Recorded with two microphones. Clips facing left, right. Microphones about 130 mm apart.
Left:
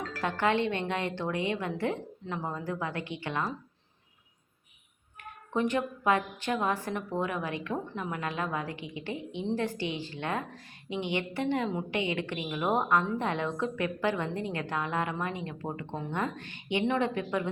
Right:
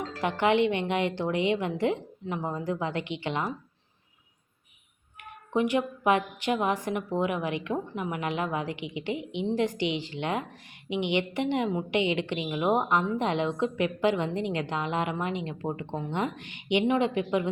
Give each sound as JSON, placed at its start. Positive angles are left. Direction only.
{"t": 0.0, "sound": "a woman's voice", "side_deg": -20}
{"t": 5.5, "sound": "a woman's voice", "side_deg": -15}